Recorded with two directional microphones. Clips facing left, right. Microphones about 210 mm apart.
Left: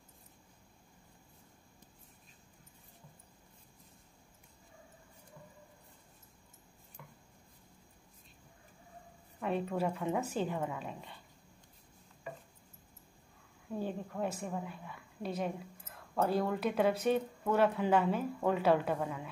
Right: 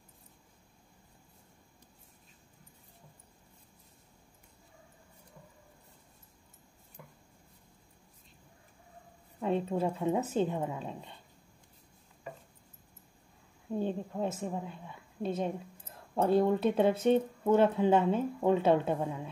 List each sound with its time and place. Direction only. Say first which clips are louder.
9.4 s speech: right 3 dB; 25° right (ahead or behind)
13.7 s speech: right 4 dB; 20° right (ahead or behind)